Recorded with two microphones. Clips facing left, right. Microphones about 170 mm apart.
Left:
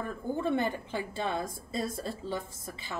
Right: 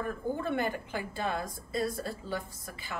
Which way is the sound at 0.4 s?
25° left (ahead or behind).